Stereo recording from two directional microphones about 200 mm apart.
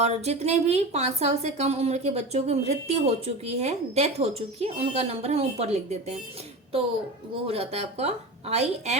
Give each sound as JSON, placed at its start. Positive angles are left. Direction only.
{"t": 0.0, "sound": "a woman's voice", "side_deg": -35}
{"t": 7.4, "sound": "a woman's voice", "side_deg": -30}